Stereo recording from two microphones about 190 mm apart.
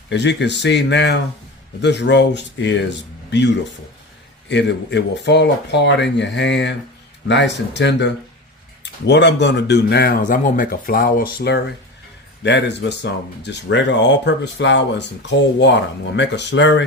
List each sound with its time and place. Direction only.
0.1 s a man's voice: 65° left (ahead or behind)
12.4 s speech: 65° left (ahead or behind)